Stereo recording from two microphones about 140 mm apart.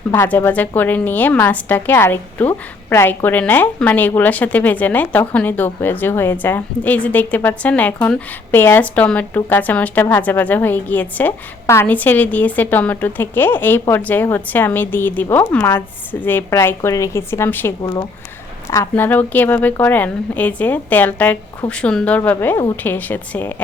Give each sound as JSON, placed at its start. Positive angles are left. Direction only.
{"t": 0.1, "sound": "a woman's voice", "side_deg": 15}